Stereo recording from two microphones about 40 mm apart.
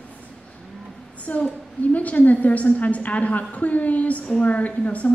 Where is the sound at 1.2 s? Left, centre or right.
Left.